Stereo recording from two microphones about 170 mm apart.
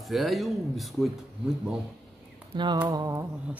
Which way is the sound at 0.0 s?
Centre (ahead or behind).